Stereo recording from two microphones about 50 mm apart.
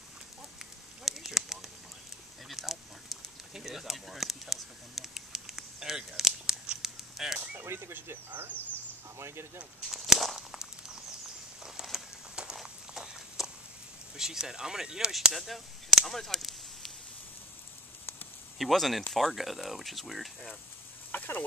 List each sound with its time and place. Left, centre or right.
0.6 s a sound: centre
7.6 s speech: right
9.8 s speech: centre
11.6 s a sound: centre
12.9 s horse: centre
14.1 s speech: centre
16.1 s arrow: centre
18.6 s speech: centre
21.1 s a sound: left